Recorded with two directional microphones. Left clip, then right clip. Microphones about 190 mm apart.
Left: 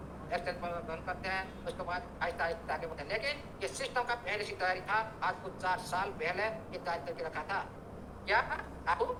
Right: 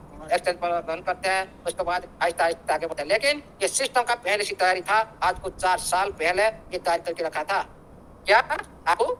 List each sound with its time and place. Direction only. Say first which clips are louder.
0.3 s a man's voice: right 13 dB; 55° right (ahead or behind)